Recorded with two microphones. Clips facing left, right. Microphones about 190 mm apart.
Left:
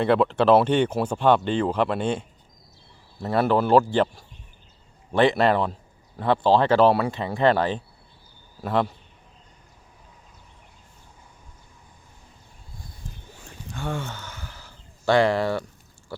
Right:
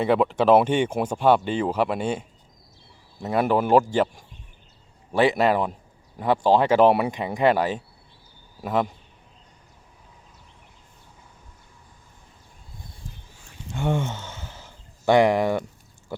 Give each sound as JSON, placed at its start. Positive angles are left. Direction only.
{"t": 0.0, "sound": "speech", "side_deg": -10}
{"t": 3.2, "sound": "speech", "side_deg": -15}
{"t": 13.7, "sound": "a sound", "side_deg": -20}